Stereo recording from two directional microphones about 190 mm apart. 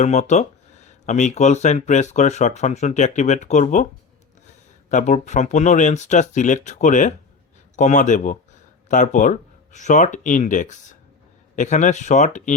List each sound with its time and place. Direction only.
0.0 s speech: 40° left (ahead or behind)
4.9 s speech: 40° left (ahead or behind)